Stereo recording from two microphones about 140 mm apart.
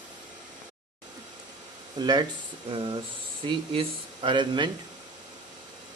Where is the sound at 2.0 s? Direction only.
30° right (ahead or behind).